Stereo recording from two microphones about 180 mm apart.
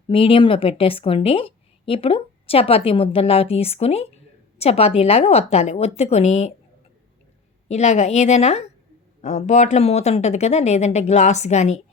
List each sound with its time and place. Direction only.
0.1 s a woman's voice: 30° left (ahead or behind)
7.7 s a woman's voice: 40° left (ahead or behind)